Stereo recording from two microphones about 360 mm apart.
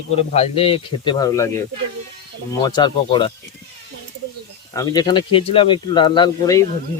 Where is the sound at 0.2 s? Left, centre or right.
Centre.